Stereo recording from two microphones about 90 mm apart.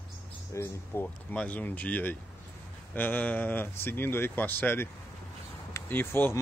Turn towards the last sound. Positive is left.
turn(degrees=25)  # may be behind; listen again after turning